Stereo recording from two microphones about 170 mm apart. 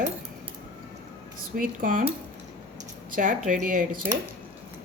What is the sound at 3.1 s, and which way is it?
Speech, 50° right (ahead or behind).